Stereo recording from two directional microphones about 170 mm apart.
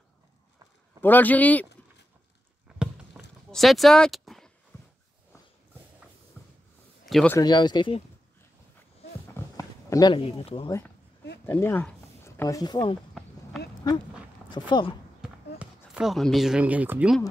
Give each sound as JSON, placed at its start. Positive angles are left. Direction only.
{"t": 1.0, "sound": "a man's voice", "side_deg": 10}
{"t": 2.8, "sound": "a sound", "side_deg": 0}
{"t": 6.4, "sound": "a sound", "side_deg": 10}
{"t": 7.1, "sound": "speech", "side_deg": 0}
{"t": 7.3, "sound": "speech", "side_deg": 25}
{"t": 9.3, "sound": "a sound", "side_deg": 15}
{"t": 11.4, "sound": "a man's voice", "side_deg": 15}
{"t": 14.7, "sound": "speech", "side_deg": 30}
{"t": 15.2, "sound": "speech", "side_deg": -5}